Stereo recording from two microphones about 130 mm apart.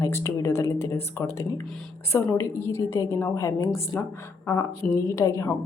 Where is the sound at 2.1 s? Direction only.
20° left (ahead or behind).